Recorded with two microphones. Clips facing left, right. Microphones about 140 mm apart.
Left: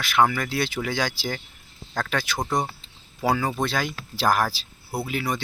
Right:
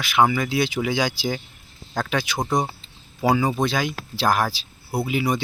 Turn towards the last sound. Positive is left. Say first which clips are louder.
# right 4 dB
turn(degrees=-10)  # may be behind; listen again after turning